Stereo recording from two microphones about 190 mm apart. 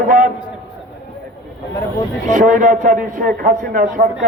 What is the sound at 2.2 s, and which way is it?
A man's voice, 45° right (ahead or behind).